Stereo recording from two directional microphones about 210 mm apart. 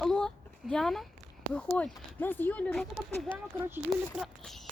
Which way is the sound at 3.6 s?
10° right (ahead or behind).